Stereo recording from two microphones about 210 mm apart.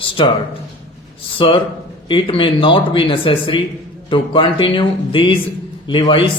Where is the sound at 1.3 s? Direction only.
25° left (ahead or behind).